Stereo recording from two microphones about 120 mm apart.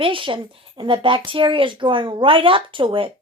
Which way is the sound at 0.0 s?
45° right (ahead or behind).